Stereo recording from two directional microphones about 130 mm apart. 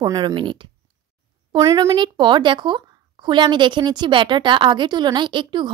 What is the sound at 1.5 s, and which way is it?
A woman's voice, 25° right (ahead or behind).